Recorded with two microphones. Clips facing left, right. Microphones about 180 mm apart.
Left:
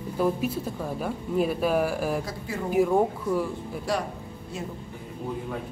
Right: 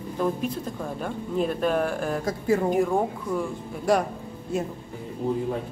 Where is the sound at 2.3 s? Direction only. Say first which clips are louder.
Right 9 dB; 45° right (ahead or behind).